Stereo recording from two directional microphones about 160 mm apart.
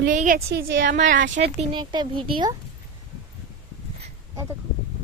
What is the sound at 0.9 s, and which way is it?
Speech, 45° right (ahead or behind).